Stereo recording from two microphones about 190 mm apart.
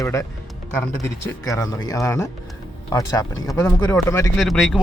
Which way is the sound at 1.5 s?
15° left (ahead or behind).